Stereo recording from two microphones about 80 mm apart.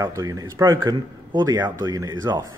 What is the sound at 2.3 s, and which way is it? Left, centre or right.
Speech, right.